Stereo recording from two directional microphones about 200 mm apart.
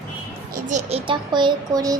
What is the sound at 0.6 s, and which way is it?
Speech, 35° right (ahead or behind).